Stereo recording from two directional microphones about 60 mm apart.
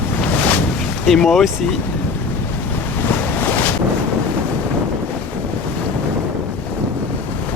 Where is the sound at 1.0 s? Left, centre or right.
Centre.